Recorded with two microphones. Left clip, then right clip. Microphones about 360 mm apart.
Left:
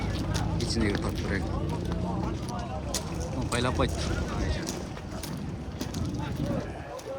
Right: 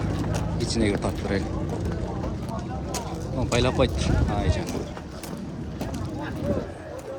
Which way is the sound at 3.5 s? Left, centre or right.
Centre.